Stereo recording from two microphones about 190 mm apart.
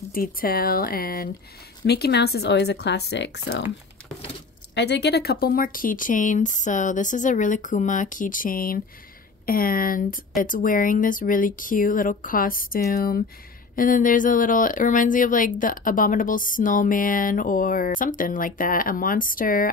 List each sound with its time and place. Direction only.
0.1 s speech: 50° left (ahead or behind); by 3.6 s 65° left (ahead or behind)
4.7 s speech: 60° left (ahead or behind)